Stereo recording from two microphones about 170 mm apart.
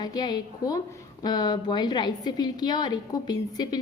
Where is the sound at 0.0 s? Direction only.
25° left (ahead or behind).